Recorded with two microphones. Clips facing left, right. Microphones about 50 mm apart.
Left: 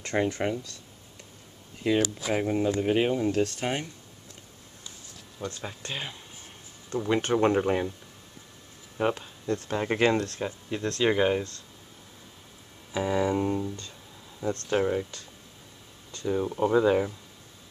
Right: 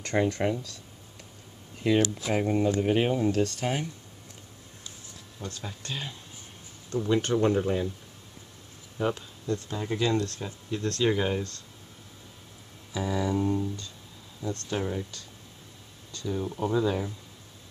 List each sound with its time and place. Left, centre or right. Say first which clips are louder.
0.0 s speech: right 1 dB; centre
1.8 s speech: right 1 dB; centre
5.4 s speech: left 3 dB; left
7.4 s speech: left 2 dB; left
8.9 s speech: left 2 dB; left
10.8 s speech: left 2 dB; centre
12.9 s speech: left 3 dB; left